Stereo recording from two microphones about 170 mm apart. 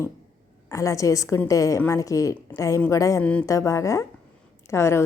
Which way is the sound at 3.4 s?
20° left (ahead or behind).